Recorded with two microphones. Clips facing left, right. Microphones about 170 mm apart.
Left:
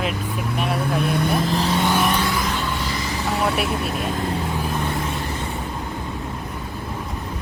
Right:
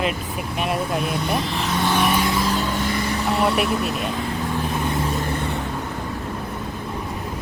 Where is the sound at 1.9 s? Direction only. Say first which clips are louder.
Even; centre (ahead or behind).